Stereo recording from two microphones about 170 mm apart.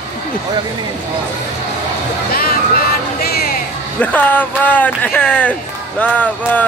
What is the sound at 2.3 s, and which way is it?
Music, 65° left (ahead or behind).